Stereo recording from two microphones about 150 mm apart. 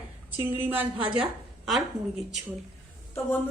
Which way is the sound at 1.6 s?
Centre (ahead or behind).